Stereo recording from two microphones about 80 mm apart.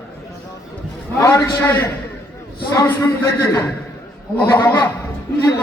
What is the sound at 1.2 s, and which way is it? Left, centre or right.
A man's voice, left.